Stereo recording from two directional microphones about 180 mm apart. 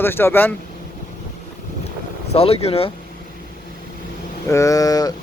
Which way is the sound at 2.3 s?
35° left (ahead or behind).